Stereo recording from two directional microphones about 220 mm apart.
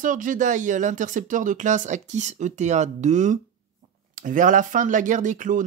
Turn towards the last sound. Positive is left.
turn(degrees=-35)  # may be behind; listen again after turning